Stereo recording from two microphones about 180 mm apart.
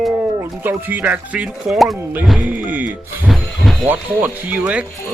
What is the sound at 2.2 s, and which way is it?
Speech, centre (ahead or behind).